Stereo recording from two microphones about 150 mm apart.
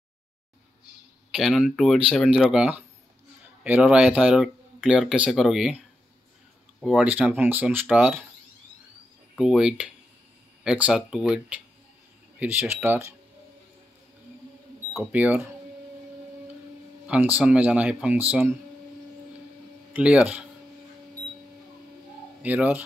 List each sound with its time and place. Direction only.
1.3 s speech: 5° right (ahead or behind)
6.8 s speech: centre (ahead or behind)
7.1 s speech: 10° right (ahead or behind)
9.4 s speech: 5° right (ahead or behind)
15.0 s speech: 10° right (ahead or behind)
17.1 s speech: 10° right (ahead or behind)
19.9 s speech: 10° right (ahead or behind)
22.4 s speech: 10° right (ahead or behind)